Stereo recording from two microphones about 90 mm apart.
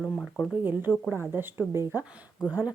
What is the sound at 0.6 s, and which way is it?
Speech, 20° right (ahead or behind).